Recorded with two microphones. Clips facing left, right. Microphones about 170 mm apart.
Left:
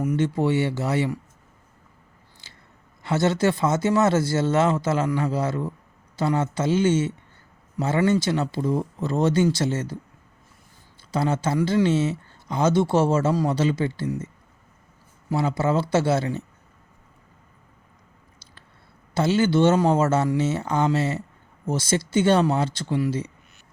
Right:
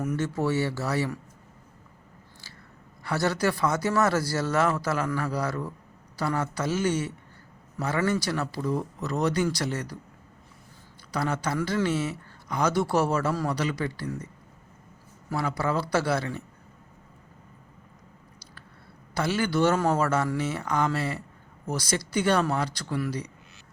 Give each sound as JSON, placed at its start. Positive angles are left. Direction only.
{"t": 0.0, "sound": "speech", "side_deg": 15}
{"t": 2.4, "sound": "scissors", "side_deg": 20}
{"t": 3.0, "sound": "speech", "side_deg": 20}
{"t": 11.1, "sound": "speech", "side_deg": 25}
{"t": 15.3, "sound": "speech", "side_deg": 25}
{"t": 19.1, "sound": "speech", "side_deg": 25}